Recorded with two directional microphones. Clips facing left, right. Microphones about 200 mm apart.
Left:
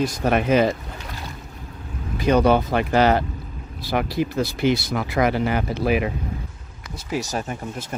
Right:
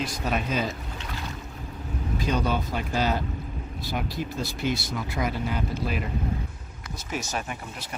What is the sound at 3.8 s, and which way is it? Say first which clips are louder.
Speech: left 9 dB; 85° left.